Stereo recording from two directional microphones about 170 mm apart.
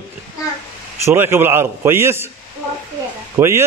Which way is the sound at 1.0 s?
15° right (ahead or behind).